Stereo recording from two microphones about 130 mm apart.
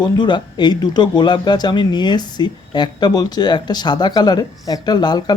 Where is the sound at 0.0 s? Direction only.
35° left (ahead or behind).